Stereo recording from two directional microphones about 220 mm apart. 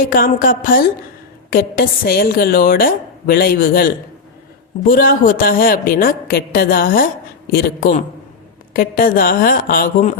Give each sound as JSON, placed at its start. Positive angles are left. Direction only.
{"t": 0.0, "sound": "a woman's voice", "side_deg": 40}